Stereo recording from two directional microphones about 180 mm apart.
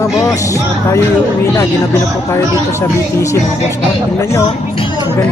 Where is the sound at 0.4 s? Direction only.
15° left (ahead or behind).